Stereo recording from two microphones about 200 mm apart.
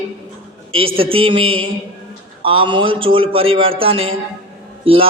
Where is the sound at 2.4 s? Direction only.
25° right (ahead or behind).